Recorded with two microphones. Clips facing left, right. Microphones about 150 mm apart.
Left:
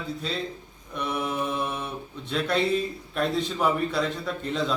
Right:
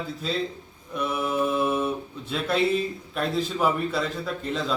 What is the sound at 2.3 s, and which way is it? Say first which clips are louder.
A man's voice: right 1 dB; centre (ahead or behind).